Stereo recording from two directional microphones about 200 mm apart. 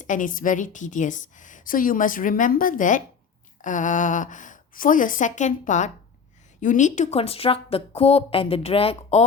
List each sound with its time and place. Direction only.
0.0 s a woman's voice: 40° left (ahead or behind)